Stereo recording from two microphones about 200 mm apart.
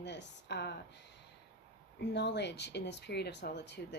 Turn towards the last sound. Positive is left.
turn(degrees=60)  # may be behind; listen again after turning